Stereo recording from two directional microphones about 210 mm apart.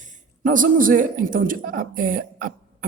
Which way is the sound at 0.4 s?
40° right (ahead or behind).